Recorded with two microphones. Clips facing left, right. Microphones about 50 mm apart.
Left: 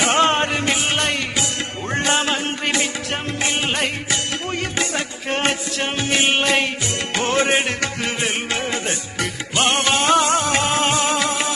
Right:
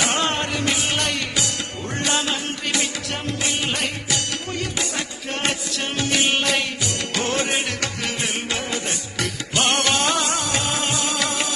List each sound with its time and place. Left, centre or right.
0.0 s music: left
9.6 s music: centre
9.9 s music: left